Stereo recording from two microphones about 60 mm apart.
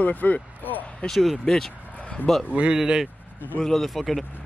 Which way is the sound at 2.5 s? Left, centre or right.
Right.